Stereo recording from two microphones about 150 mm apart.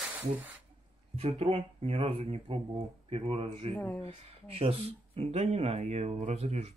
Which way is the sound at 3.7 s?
10° left (ahead or behind).